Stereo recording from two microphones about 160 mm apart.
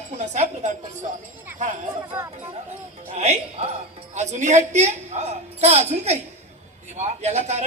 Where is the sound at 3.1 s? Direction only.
45° right (ahead or behind).